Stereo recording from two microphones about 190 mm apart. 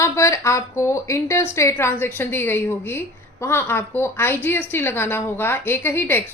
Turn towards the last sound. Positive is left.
turn(degrees=10)  # may be behind; listen again after turning